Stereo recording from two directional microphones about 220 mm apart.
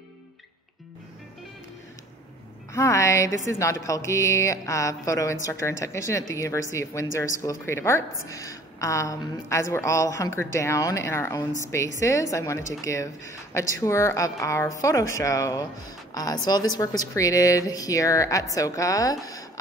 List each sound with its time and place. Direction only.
2.7 s a woman's voice: 15° left (ahead or behind)